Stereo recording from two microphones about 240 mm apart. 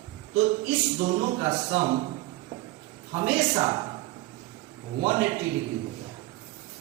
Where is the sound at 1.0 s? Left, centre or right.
Right.